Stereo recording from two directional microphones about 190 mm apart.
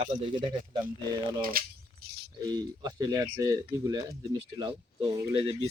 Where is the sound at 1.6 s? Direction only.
50° right (ahead or behind).